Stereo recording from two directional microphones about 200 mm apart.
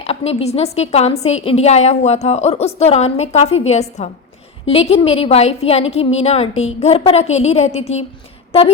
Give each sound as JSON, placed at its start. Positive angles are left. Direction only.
{"t": 0.0, "sound": "a woman's voice", "side_deg": 30}